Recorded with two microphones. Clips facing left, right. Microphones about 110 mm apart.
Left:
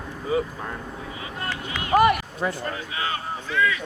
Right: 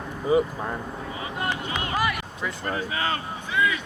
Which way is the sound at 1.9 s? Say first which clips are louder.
Left 11 dB; 55° left (ahead or behind).